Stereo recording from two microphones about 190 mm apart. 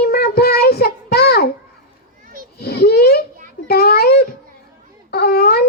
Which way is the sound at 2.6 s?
55° left (ahead or behind).